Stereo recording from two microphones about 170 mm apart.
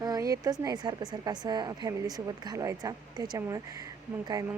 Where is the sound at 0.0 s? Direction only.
20° right (ahead or behind).